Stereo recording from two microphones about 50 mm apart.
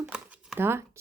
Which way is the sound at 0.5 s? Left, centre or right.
Right.